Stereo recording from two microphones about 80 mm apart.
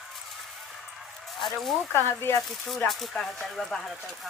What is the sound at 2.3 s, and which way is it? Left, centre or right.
Speech, left.